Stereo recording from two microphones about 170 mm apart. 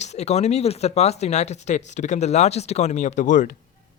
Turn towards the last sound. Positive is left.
turn(degrees=50)  # may be behind; listen again after turning